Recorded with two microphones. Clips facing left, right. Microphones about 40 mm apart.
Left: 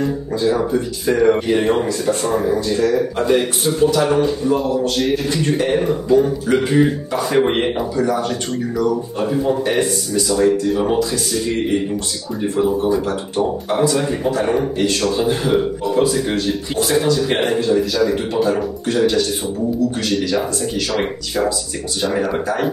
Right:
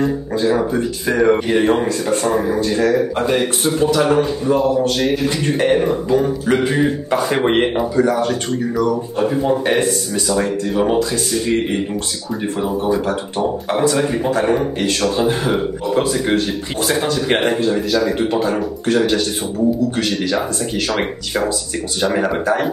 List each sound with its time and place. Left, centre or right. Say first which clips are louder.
0.0 s speech: right 1 dB; right
3.3 s speech: even; centre
8.0 s speech: right 3 dB; right
10.3 s speech: left 3 dB; right
13.8 s speech: right 4 dB; centre
15.0 s speech: right 1 dB; right
17.9 s speech: even; centre
18.9 s speech: left 1 dB; right